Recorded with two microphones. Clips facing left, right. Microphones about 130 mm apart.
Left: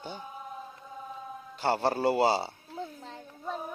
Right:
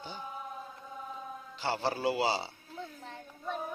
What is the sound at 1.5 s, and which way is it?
Speech, 55° left (ahead or behind).